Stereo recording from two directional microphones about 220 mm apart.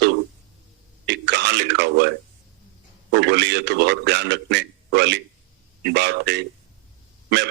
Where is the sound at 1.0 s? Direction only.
55° right (ahead or behind).